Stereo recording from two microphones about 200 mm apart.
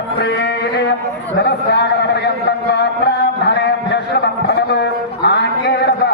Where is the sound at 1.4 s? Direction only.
55° left (ahead or behind).